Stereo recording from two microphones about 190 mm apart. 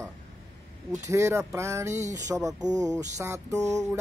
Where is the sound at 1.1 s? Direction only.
15° right (ahead or behind).